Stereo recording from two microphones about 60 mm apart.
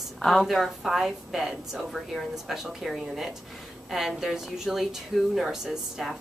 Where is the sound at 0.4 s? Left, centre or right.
Centre.